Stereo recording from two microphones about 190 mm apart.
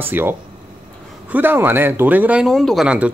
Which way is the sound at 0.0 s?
10° right (ahead or behind).